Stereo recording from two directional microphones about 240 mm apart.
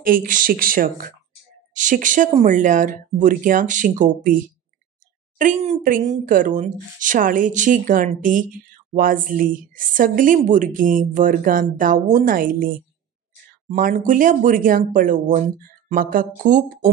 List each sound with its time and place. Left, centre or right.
0.0 s speech: right
5.4 s speech: right